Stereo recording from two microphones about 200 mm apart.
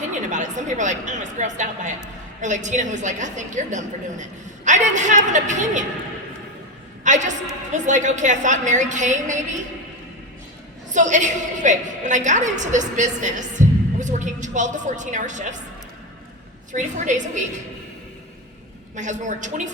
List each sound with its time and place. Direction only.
0.0 s a woman's voice: 35° right (ahead or behind)
7.0 s a woman's voice: 40° right (ahead or behind)
10.9 s a woman's voice: 40° right (ahead or behind)
16.7 s a woman's voice: 40° right (ahead or behind)
18.9 s a woman's voice: 35° right (ahead or behind)